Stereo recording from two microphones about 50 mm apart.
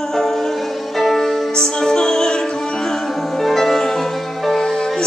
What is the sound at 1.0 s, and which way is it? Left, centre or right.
Music, centre.